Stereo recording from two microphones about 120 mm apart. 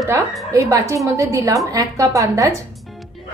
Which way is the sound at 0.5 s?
30° right (ahead or behind).